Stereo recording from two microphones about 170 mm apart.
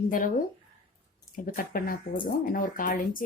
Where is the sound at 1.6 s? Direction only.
60° left (ahead or behind).